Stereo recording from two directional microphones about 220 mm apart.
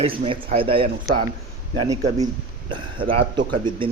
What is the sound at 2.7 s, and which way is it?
A man's voice, 20° right (ahead or behind).